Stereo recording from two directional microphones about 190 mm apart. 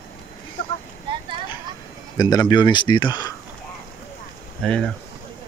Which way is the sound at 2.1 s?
20° left (ahead or behind).